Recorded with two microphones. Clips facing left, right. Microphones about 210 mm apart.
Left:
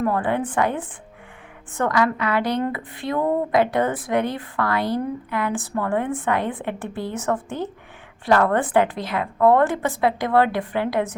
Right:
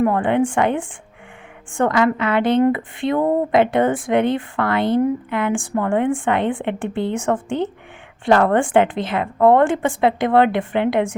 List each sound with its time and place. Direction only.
0.0 s a woman's voice: 20° right (ahead or behind)
1.8 s a woman's voice: 25° right (ahead or behind)